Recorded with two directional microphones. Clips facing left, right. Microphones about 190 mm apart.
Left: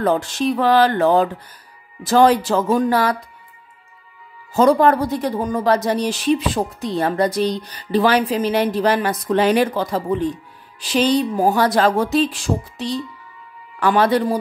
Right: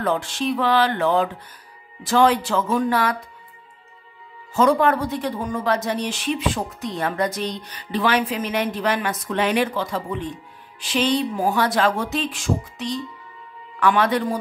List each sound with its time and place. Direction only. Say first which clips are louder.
0.0 s speech: left 4 dB; 40° left (ahead or behind)
4.6 s speech: left 4 dB; 35° left (ahead or behind)